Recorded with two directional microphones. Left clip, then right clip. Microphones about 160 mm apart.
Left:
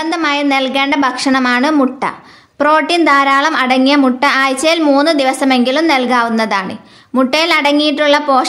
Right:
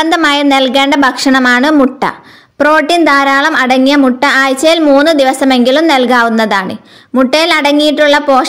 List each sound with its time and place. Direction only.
0.0 s a woman's voice: 40° right (ahead or behind)